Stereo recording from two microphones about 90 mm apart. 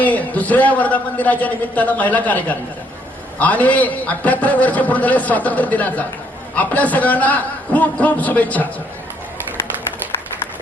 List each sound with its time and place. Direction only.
0.0 s a man's voice: 15° left (ahead or behind)